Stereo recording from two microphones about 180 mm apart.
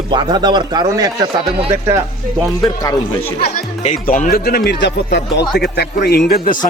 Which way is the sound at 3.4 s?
40° left (ahead or behind).